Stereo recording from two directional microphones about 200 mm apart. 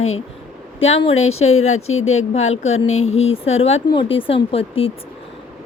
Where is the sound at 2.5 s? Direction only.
90° left.